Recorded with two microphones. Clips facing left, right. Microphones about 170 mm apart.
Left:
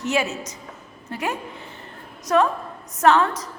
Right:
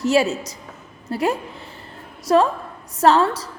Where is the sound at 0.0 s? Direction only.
35° right (ahead or behind).